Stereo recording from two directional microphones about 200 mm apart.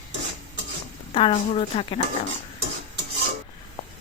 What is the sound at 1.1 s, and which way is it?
Speech, 25° left (ahead or behind).